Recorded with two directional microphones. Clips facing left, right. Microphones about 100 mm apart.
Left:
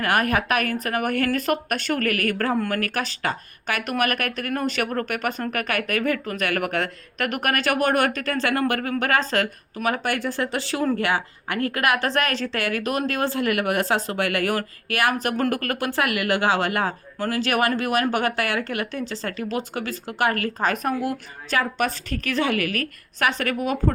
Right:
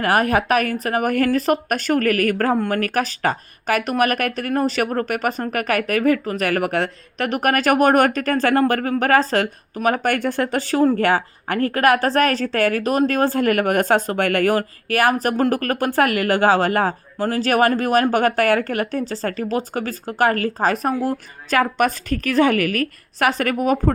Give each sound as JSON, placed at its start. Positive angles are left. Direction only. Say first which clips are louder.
{"t": 0.0, "sound": "speech", "louder": "right 4 dB", "side_deg": -30}
{"t": 2.6, "sound": "speech", "louder": "right 3 dB", "side_deg": -25}
{"t": 3.2, "sound": "a woman's voice", "louder": "right 5 dB", "side_deg": -40}
{"t": 14.5, "sound": "a woman's voice", "louder": "right 6 dB", "side_deg": -40}